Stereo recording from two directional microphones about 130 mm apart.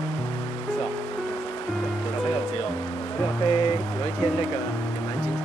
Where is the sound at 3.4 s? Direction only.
35° left (ahead or behind).